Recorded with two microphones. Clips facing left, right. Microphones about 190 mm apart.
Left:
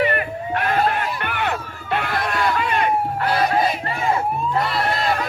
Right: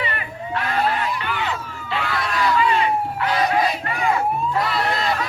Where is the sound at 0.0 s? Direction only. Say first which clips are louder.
Left 7 dB; 55° left (ahead or behind).